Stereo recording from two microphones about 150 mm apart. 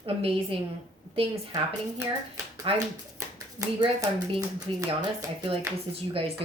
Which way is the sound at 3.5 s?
25° right (ahead or behind).